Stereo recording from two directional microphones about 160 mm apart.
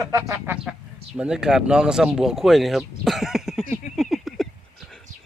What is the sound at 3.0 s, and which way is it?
Cough, centre (ahead or behind).